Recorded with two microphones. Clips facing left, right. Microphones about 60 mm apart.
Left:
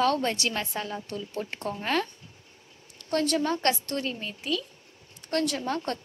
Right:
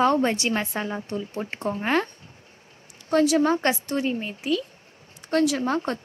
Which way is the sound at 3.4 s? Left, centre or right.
Centre.